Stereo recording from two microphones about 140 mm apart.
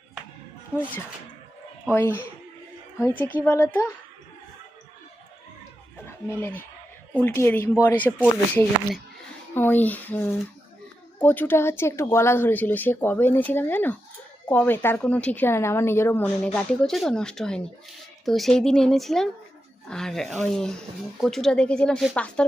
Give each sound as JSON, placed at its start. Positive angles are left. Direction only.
{"t": 1.9, "sound": "a woman's voice", "side_deg": 15}
{"t": 6.1, "sound": "a woman's voice", "side_deg": 15}
{"t": 9.6, "sound": "a woman's voice", "side_deg": 15}